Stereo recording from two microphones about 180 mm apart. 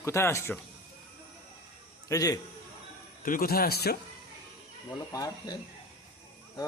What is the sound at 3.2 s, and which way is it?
Speech, 55° left (ahead or behind).